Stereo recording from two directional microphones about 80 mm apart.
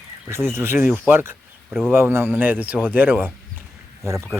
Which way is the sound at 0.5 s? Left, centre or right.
Right.